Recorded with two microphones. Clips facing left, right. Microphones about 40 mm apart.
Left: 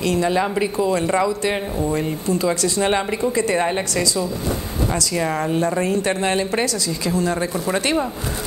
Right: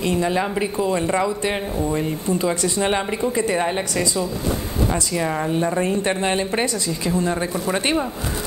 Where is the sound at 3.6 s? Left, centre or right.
Centre.